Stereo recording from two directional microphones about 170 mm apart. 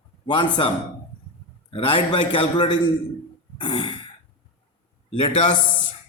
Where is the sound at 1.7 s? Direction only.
35° left (ahead or behind).